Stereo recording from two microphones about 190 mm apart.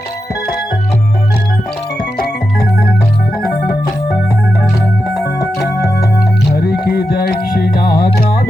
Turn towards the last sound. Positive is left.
turn(degrees=45)  # may be behind; listen again after turning